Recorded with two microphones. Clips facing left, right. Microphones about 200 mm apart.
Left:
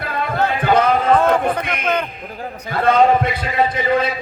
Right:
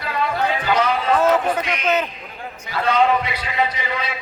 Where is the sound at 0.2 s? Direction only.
55° left (ahead or behind).